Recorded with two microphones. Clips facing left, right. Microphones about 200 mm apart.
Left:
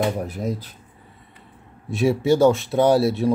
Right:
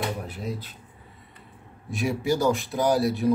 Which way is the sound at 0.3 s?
45° left (ahead or behind).